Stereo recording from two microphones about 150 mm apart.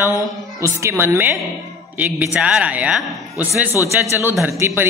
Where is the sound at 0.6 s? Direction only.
20° right (ahead or behind).